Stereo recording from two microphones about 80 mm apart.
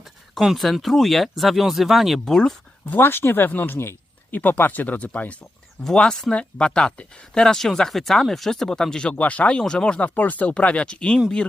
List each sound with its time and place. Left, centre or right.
0.0 s speech: centre
2.8 s speech: left